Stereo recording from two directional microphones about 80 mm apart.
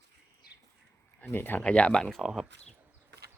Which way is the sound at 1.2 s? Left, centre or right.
Left.